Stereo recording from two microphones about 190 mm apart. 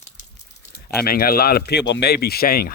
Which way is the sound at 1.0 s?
50° left (ahead or behind).